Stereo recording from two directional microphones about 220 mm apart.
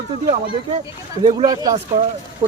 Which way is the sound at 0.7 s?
20° right (ahead or behind).